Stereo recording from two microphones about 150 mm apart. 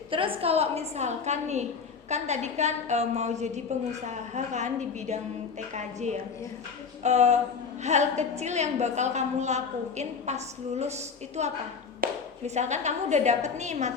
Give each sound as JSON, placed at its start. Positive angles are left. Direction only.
{"t": 0.1, "sound": "a woman's voice", "side_deg": -35}
{"t": 12.0, "sound": "a sound", "side_deg": -85}
{"t": 12.5, "sound": "a woman's voice", "side_deg": -50}